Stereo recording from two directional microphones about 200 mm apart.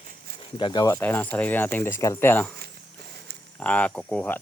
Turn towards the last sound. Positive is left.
turn(degrees=5)  # may be behind; listen again after turning